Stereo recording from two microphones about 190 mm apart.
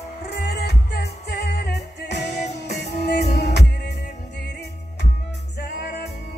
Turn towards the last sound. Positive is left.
turn(degrees=55)  # may be behind; listen again after turning